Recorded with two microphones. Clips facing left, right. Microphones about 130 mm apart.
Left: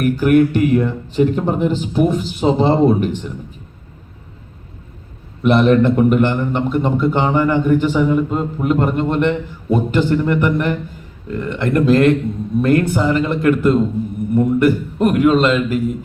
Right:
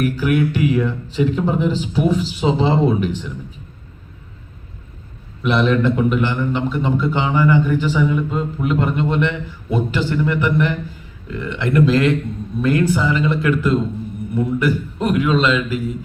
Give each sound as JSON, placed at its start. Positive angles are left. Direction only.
{"t": 0.0, "sound": "a man's voice", "side_deg": 50}
{"t": 5.4, "sound": "a man's voice", "side_deg": 50}